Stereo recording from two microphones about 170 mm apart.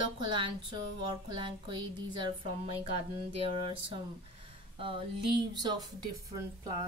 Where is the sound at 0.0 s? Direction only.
25° right (ahead or behind).